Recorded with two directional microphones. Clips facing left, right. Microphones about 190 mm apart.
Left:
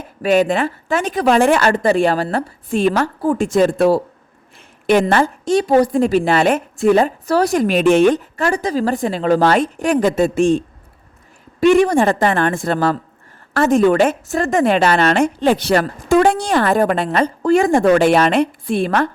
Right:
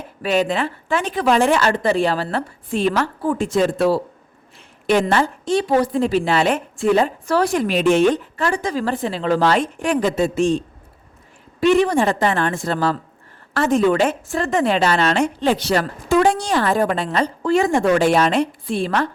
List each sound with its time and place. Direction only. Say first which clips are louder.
0.2 s a woman's voice: left 4 dB; 45° left (ahead or behind)
11.6 s a woman's voice: left 3 dB; 45° left (ahead or behind)